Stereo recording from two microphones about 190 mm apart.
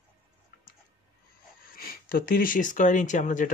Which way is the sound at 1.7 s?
50° left (ahead or behind).